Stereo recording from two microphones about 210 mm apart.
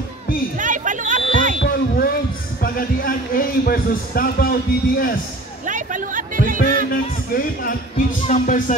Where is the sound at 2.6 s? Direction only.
45° left (ahead or behind).